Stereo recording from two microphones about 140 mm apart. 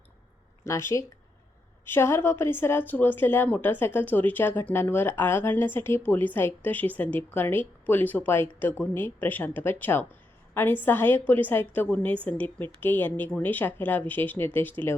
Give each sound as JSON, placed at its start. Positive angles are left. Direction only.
{"t": 0.6, "sound": "a woman's voice", "side_deg": 20}